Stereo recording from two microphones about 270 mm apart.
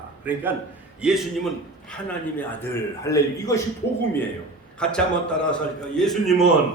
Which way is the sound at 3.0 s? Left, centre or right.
Centre.